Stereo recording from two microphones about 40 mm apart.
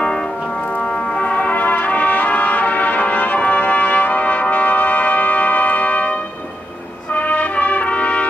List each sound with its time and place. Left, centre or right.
1.2 s brass instrument: left
7.2 s brass instrument: left